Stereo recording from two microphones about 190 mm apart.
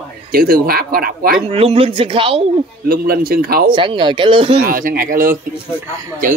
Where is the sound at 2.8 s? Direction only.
50° right (ahead or behind).